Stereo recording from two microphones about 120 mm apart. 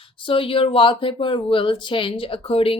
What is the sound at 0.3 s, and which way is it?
A woman's voice, 50° left (ahead or behind).